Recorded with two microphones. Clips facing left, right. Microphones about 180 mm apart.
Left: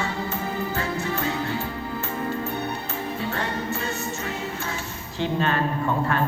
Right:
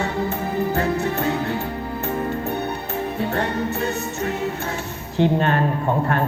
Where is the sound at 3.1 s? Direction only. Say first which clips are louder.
Right 6 dB; 60° right (ahead or behind).